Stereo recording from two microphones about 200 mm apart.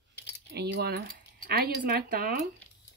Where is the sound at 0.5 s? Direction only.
55° right (ahead or behind).